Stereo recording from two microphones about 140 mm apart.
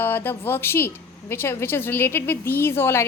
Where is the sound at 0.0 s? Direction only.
15° left (ahead or behind).